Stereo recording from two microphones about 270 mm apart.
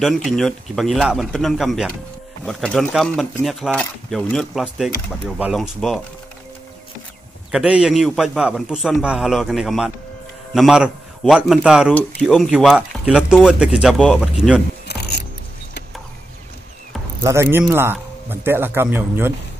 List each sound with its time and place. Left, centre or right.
0.0 s speech: centre
7.5 s speech: centre
14.9 s mechanisms: left
17.2 s speech: centre